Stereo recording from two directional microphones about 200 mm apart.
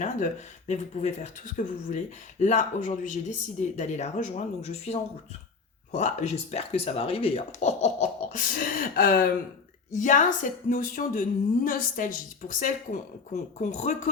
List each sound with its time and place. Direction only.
0.7 s a woman's voice: 35° left (ahead or behind)
8.3 s a woman's voice: 45° left (ahead or behind)